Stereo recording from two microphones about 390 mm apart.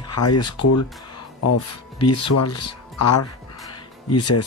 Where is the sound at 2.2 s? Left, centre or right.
Left.